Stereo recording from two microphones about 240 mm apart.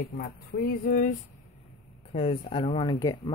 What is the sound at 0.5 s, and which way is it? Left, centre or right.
Speech, left.